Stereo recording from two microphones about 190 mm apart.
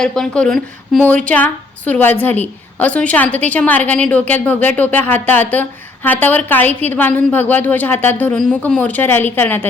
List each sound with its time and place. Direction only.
0.0 s a woman's voice: 5° left (ahead or behind)